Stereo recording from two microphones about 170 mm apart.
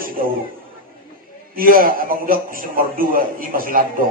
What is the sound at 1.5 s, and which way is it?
A man's voice, 55° right (ahead or behind).